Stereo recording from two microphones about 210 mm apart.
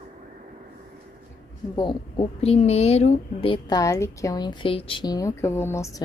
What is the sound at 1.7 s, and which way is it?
A woman's voice, 20° left (ahead or behind).